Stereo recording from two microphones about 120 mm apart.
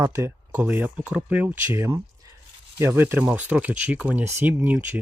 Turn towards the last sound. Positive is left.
turn(degrees=-20)  # may be behind; listen again after turning